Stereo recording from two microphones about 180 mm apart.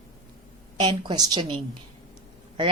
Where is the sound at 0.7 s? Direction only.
25° right (ahead or behind).